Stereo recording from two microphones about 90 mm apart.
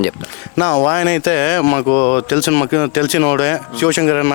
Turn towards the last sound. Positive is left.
turn(degrees=25)  # may be behind; listen again after turning